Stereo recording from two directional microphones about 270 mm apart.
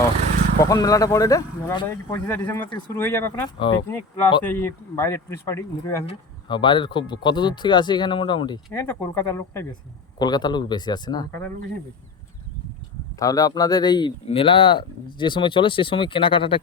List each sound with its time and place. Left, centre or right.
0.6 s speech: centre
13.1 s speech: centre